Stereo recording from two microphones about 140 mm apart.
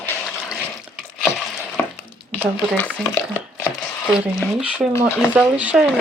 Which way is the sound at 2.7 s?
10° left (ahead or behind).